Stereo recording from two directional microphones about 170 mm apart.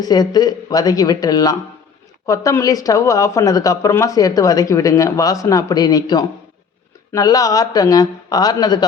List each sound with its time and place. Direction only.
0.0 s speech: 25° left (ahead or behind)